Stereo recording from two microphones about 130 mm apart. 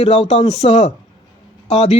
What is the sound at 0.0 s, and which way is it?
Speech, 50° left (ahead or behind).